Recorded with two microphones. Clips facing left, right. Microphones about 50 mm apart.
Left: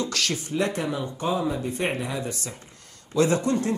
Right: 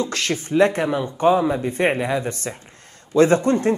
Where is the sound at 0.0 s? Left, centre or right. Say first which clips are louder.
Right 4 dB; right.